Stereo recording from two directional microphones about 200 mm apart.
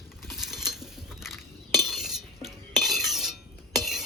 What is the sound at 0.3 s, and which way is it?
Cutlery, centre (ahead or behind).